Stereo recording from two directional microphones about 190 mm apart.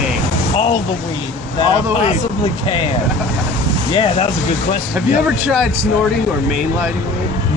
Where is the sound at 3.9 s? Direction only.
25° left (ahead or behind).